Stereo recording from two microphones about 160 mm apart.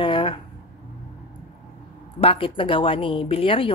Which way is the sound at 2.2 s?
35° left (ahead or behind).